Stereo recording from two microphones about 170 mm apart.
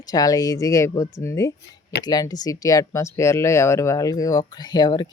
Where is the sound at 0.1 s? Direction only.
20° left (ahead or behind).